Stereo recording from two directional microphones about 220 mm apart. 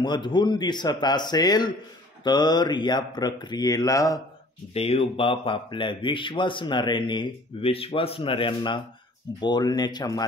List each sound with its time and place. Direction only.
0.0 s speech: 20° left (ahead or behind)
4.7 s speech: 25° left (ahead or behind)